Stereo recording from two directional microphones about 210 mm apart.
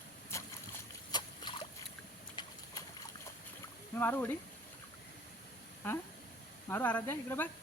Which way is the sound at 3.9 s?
10° left (ahead or behind).